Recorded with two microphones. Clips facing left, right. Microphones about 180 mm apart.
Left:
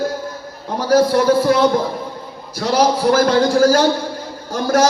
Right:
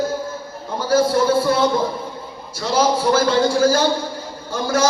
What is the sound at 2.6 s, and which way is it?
A man's voice, 40° left (ahead or behind).